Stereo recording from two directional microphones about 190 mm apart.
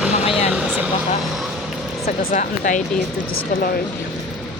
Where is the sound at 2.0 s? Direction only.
40° left (ahead or behind).